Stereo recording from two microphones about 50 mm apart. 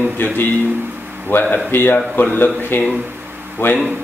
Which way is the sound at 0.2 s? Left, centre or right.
Left.